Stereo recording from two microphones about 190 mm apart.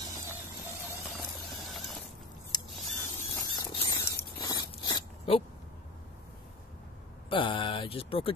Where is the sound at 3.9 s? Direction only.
20° left (ahead or behind).